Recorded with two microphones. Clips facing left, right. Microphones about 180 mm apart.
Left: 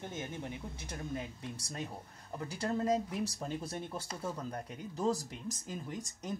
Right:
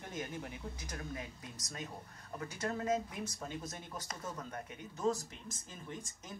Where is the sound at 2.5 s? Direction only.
35° left (ahead or behind).